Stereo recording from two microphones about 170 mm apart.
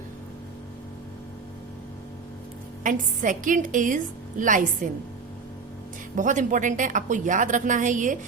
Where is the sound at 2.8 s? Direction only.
50° right (ahead or behind).